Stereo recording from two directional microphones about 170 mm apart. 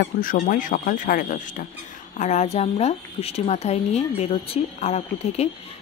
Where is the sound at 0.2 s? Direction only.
55° left (ahead or behind).